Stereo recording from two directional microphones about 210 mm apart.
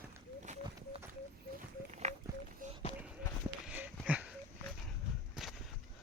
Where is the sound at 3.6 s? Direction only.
5° right (ahead or behind).